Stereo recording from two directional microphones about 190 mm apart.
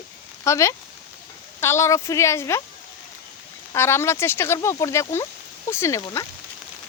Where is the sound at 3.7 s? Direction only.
15° left (ahead or behind).